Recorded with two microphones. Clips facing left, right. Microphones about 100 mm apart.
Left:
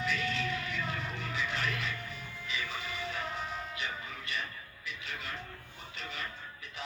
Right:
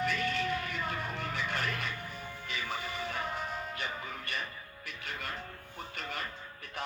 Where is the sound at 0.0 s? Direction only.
50° right (ahead or behind).